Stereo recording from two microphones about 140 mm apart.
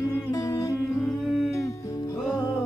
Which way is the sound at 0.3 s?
25° left (ahead or behind).